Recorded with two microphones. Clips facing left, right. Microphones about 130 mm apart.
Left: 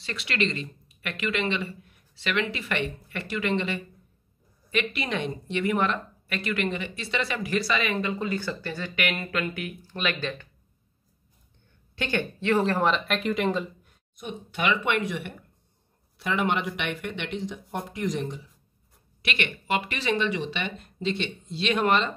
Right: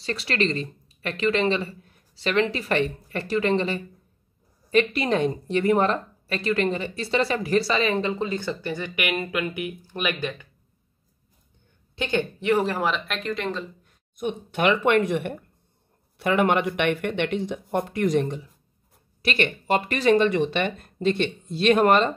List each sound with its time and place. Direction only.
0.0 s a woman's voice: 35° right (ahead or behind); by 9.8 s 15° right (ahead or behind)
11.9 s speech: 20° right (ahead or behind); by 13.7 s 10° left (ahead or behind)
14.1 s speech: 50° right (ahead or behind)
19.2 s speech: 40° right (ahead or behind)